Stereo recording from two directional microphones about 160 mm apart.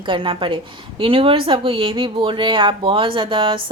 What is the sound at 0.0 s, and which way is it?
A woman's voice, 30° right (ahead or behind).